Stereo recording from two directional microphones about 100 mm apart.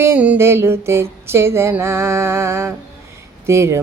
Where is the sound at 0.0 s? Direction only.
15° right (ahead or behind).